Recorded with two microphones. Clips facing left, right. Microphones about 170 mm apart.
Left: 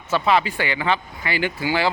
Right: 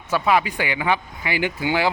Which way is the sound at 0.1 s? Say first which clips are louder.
Even; 10° right (ahead or behind).